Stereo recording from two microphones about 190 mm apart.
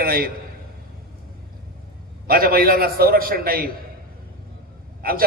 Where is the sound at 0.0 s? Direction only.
50° right (ahead or behind).